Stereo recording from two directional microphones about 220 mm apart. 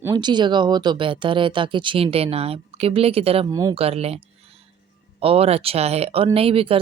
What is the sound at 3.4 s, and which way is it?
Speech, 15° right (ahead or behind).